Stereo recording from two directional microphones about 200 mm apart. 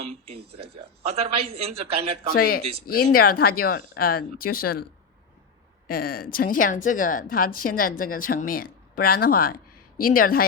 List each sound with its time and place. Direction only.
0.5 s a man's voice: 30° right (ahead or behind)
2.3 s a woman's voice: 50° left (ahead or behind)
5.9 s a woman's voice: 45° left (ahead or behind)